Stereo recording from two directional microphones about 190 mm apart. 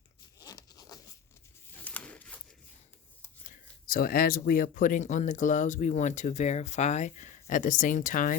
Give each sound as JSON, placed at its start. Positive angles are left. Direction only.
{"t": 0.3, "sound": "zipper", "side_deg": 20}
{"t": 1.7, "sound": "a sound", "side_deg": 10}
{"t": 3.4, "sound": "speech", "side_deg": 45}